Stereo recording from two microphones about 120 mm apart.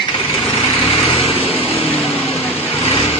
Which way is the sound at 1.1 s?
55° left (ahead or behind).